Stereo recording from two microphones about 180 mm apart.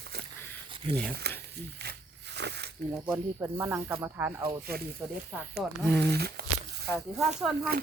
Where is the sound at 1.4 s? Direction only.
65° right (ahead or behind).